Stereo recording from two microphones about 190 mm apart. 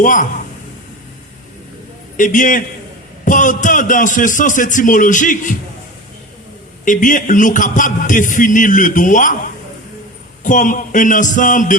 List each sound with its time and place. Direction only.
0.0 s a man's voice: 40° left (ahead or behind)
2.1 s a man's voice: 45° left (ahead or behind)
6.8 s a man's voice: 45° left (ahead or behind)
10.4 s a man's voice: 40° left (ahead or behind)